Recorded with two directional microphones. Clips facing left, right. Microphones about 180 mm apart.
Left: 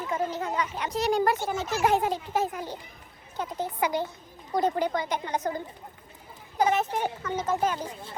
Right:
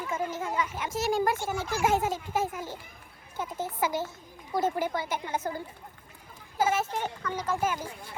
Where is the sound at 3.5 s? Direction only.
15° left (ahead or behind).